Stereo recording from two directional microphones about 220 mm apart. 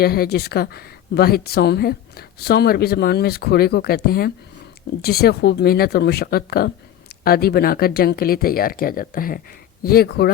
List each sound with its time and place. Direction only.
0.0 s speech: 45° left (ahead or behind)